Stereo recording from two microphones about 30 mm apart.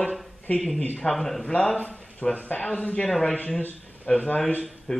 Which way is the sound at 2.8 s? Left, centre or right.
Left.